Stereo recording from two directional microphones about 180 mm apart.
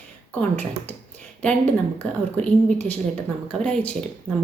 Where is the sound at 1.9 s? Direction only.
10° left (ahead or behind).